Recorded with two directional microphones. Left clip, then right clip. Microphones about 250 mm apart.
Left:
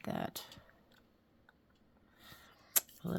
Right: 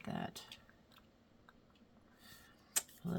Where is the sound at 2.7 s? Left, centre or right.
Left.